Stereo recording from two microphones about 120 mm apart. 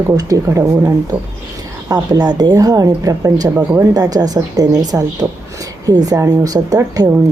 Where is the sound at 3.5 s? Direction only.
15° right (ahead or behind).